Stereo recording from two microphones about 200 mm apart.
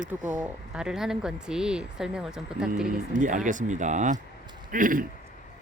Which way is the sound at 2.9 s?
40° right (ahead or behind).